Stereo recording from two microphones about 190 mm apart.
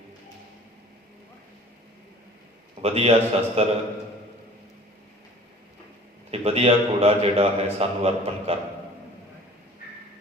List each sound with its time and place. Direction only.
2.8 s a man's voice: 35° right (ahead or behind)
6.3 s a man's voice: 30° right (ahead or behind)